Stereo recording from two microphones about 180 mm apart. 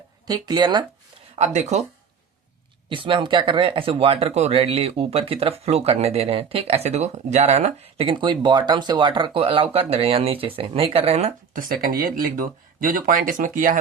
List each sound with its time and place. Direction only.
0.3 s speech: 25° right (ahead or behind)
1.4 s speech: 40° right (ahead or behind)
2.9 s speech: 30° right (ahead or behind); by 13.7 s 50° right (ahead or behind)